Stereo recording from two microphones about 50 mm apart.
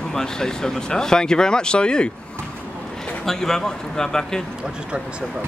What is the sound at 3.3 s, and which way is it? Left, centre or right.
Speech, centre.